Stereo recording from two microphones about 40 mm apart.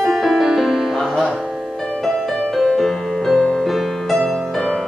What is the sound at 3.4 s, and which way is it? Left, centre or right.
Music, centre.